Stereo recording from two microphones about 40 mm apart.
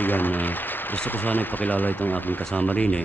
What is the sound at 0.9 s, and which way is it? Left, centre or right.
Speech, left.